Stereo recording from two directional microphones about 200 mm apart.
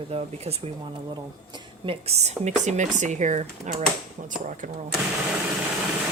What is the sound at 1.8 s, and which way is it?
Speech, 30° right (ahead or behind).